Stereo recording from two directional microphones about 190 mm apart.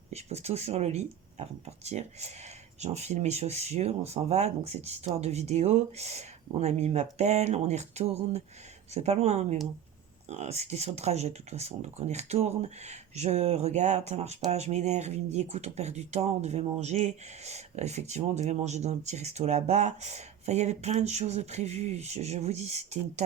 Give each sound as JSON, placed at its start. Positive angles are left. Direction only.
{"t": 0.1, "sound": "speech", "side_deg": -35}